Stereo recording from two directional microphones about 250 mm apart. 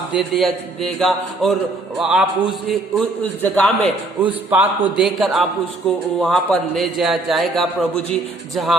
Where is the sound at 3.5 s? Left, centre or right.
Centre.